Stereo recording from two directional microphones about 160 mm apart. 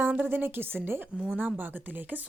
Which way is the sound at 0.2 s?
15° right (ahead or behind).